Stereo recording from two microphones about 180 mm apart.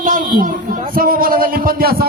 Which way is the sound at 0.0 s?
50° right (ahead or behind).